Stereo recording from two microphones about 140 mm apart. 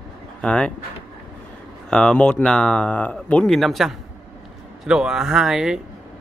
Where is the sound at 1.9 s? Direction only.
5° left (ahead or behind).